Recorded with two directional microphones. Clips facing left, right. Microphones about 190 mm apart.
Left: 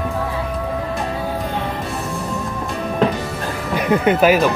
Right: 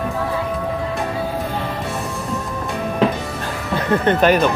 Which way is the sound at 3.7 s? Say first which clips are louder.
Left 1 dB; 15° left (ahead or behind).